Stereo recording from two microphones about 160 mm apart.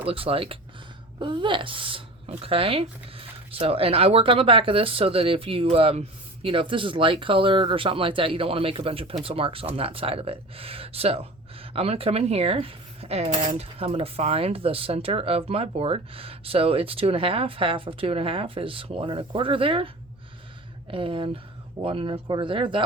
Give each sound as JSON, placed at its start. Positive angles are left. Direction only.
{"t": 0.0, "sound": "speech", "side_deg": -35}
{"t": 20.9, "sound": "speech", "side_deg": -35}